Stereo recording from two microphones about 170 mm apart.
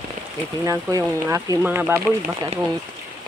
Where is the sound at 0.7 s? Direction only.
20° right (ahead or behind).